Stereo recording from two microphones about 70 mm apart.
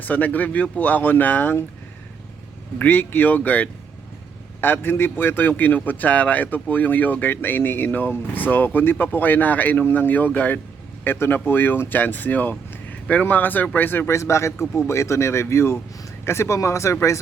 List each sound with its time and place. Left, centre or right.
0.0 s a man's voice: left
2.7 s a man's voice: left
14.1 s speech: left